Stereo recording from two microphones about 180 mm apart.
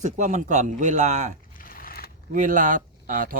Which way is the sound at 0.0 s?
40° right (ahead or behind).